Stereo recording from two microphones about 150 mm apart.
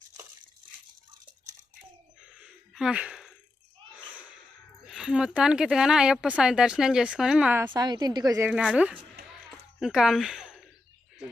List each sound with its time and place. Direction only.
2.4 s a sound: 5° right (ahead or behind)
4.1 s snort: 10° right (ahead or behind)
4.9 s speech: 5° right (ahead or behind)
7.8 s a woman's voice: 25° right (ahead or behind)
8.4 s a woman's voice: 5° right (ahead or behind)